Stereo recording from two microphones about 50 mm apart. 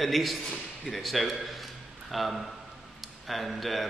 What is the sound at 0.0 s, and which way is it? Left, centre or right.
A man's voice, centre.